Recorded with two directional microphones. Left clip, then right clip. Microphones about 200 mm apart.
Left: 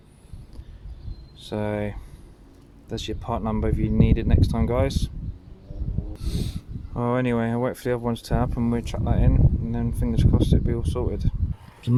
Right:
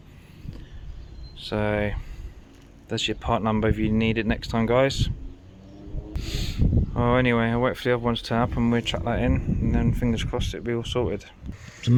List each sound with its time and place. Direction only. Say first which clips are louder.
1.4 s speech: right 3 dB; 10° left (ahead or behind)
6.2 s speech: right 7 dB; 10° left (ahead or behind)